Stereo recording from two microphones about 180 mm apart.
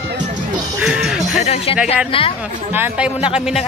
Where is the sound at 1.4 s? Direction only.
35° left (ahead or behind).